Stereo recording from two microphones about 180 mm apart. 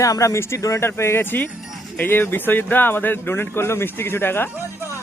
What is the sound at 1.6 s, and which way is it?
Music, centre (ahead or behind).